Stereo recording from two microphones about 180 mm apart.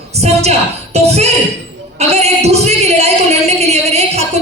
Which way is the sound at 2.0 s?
35° right (ahead or behind).